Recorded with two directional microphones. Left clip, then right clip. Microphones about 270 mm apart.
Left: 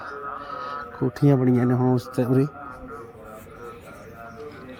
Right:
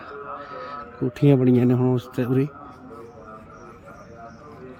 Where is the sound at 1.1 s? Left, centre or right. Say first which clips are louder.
Right 3 dB; right.